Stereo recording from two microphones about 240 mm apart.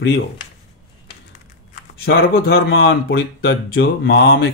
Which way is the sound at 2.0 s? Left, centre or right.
Left.